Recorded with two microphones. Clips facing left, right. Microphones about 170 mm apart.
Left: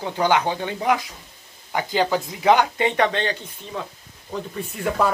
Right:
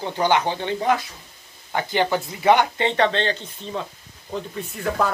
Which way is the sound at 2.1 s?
10° left (ahead or behind).